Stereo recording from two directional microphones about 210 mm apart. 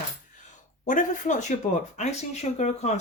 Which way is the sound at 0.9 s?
35° left (ahead or behind).